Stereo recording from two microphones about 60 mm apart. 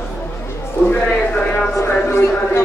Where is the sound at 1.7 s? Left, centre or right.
Left.